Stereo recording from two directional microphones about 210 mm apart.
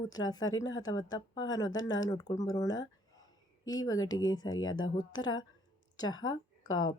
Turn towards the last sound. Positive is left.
turn(degrees=20)  # may be behind; listen again after turning